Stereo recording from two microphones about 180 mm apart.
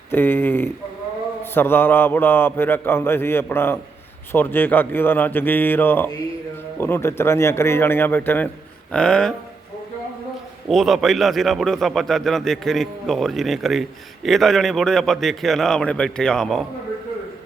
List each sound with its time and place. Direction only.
0.1 s a man's voice: 10° left (ahead or behind)
10.7 s a man's voice: centre (ahead or behind)